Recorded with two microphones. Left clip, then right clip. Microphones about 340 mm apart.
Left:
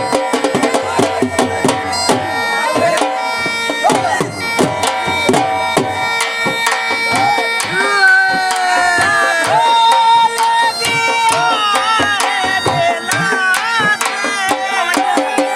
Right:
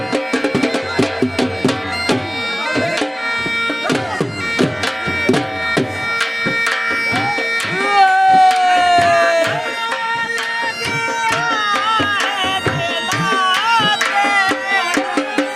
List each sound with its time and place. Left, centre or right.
1.4 s music: left
7.9 s a sound: centre
9.8 s music: centre
13.4 s music: centre